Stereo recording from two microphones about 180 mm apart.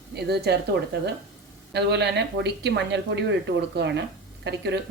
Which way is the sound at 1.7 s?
70° right (ahead or behind).